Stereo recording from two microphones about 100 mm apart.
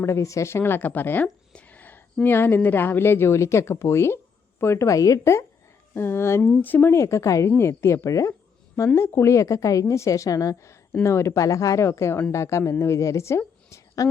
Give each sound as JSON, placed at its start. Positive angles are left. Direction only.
{"t": 0.0, "sound": "a woman's voice", "side_deg": 30}